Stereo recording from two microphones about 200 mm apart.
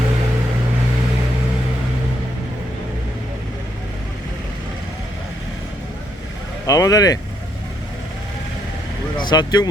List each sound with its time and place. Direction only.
6.7 s speech: 15° left (ahead or behind)
9.2 s speech: 20° left (ahead or behind)